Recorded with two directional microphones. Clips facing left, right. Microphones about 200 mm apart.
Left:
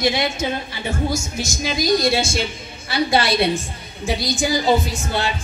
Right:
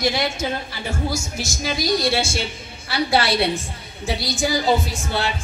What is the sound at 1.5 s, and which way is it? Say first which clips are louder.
Speech: left 3 dB; 15° left (ahead or behind).